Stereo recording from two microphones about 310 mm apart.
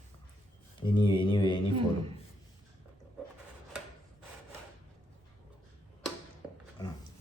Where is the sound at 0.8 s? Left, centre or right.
Centre.